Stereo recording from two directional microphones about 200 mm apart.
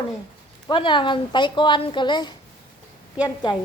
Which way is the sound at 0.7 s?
25° left (ahead or behind).